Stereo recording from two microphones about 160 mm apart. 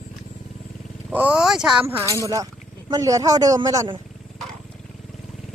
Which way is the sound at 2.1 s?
20° right (ahead or behind).